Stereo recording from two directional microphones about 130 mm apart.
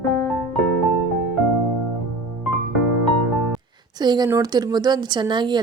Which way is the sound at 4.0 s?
30° right (ahead or behind).